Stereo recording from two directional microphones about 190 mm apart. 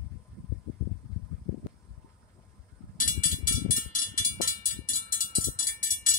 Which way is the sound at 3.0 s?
45° left (ahead or behind).